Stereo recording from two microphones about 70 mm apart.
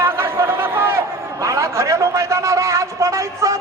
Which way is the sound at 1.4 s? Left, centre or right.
Right.